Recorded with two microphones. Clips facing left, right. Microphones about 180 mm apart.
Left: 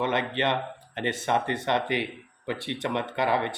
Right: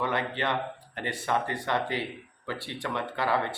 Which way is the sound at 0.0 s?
20° left (ahead or behind).